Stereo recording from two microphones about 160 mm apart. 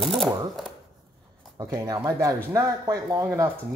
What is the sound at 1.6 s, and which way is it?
Speech, 20° right (ahead or behind).